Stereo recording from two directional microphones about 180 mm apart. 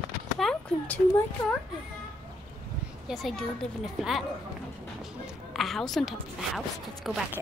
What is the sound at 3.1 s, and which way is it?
A child's voice, centre (ahead or behind).